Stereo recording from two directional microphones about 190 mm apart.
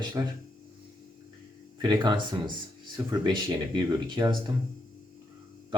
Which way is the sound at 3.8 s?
25° right (ahead or behind).